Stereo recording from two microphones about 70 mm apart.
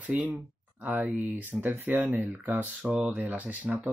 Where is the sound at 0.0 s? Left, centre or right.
Right.